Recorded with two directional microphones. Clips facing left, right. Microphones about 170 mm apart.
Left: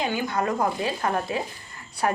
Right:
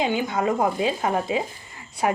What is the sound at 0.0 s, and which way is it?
Speech, 20° right (ahead or behind).